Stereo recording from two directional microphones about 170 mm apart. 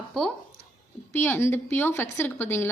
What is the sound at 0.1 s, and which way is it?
Speech, centre (ahead or behind).